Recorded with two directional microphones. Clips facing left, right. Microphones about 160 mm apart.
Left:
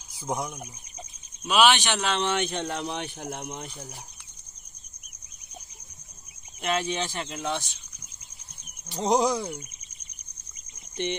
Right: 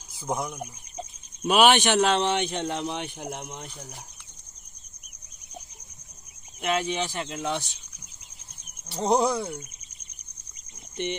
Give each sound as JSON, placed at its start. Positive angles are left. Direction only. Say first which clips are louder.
{"t": 0.3, "sound": "speech", "louder": "right 1 dB", "side_deg": 5}
{"t": 1.5, "sound": "a man's voice", "louder": "right 2 dB", "side_deg": -50}
{"t": 2.0, "sound": "speech", "louder": "right 4 dB", "side_deg": -35}
{"t": 3.3, "sound": "speech", "louder": "left 2 dB", "side_deg": 0}
{"t": 6.6, "sound": "speech", "louder": "right 1 dB", "side_deg": -10}
{"t": 8.9, "sound": "speech", "louder": "even", "side_deg": -5}